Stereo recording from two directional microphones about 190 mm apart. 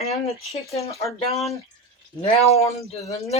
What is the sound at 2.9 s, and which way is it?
Speech, 35° left (ahead or behind).